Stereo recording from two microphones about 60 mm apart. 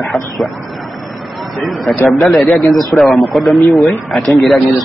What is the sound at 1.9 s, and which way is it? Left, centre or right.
A man's voice, centre.